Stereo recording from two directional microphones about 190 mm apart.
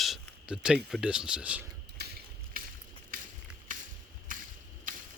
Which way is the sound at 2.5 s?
50° right (ahead or behind).